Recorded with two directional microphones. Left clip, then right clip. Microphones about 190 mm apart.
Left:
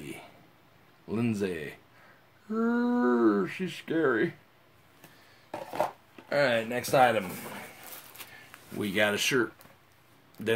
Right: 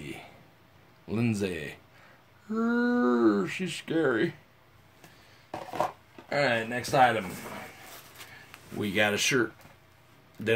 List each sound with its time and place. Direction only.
0.0 s a sound: 5° left (ahead or behind)
1.0 s speech: centre (ahead or behind)
5.5 s speech: 25° left (ahead or behind)
8.7 s speech: 10° left (ahead or behind)